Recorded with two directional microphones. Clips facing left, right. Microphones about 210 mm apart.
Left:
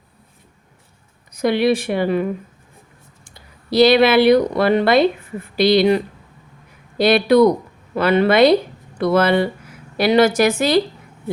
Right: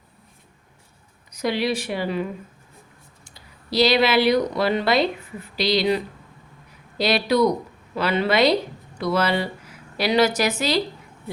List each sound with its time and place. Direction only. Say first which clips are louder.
1.3 s speech: left 7 dB; 55° left (ahead or behind)
3.3 s speech: left 7 dB; 55° left (ahead or behind)
7.0 s speech: left 7 dB; 55° left (ahead or behind)